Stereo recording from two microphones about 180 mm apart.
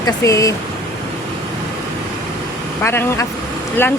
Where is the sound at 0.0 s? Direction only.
20° left (ahead or behind).